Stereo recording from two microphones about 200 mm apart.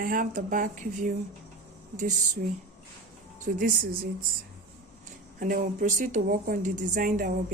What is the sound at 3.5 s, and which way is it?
Speech, 45° right (ahead or behind).